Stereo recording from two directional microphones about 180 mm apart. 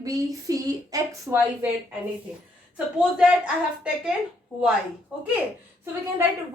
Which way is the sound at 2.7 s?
5° right (ahead or behind).